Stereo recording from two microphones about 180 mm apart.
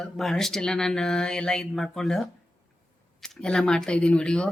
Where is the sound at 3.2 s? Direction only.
5° left (ahead or behind).